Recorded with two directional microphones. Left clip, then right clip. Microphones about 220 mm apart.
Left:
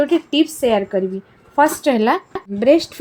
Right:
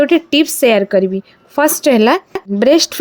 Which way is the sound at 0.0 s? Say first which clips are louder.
Right 5 dB; 45° right (ahead or behind).